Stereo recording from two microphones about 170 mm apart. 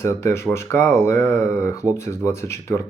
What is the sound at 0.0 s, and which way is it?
Speech, 15° left (ahead or behind).